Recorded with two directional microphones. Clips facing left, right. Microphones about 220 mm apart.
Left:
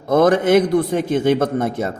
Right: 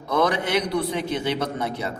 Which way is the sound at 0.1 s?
50° left (ahead or behind).